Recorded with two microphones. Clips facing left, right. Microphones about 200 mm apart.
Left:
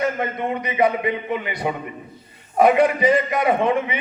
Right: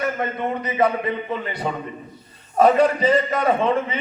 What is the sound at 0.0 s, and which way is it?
A man's voice, 15° left (ahead or behind).